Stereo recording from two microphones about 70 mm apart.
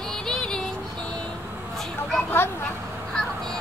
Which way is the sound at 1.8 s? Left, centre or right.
Centre.